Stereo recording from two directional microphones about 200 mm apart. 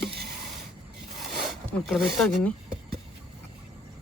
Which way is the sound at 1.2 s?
Centre (ahead or behind).